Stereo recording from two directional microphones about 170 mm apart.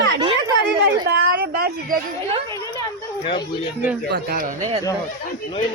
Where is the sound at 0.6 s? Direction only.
75° right (ahead or behind).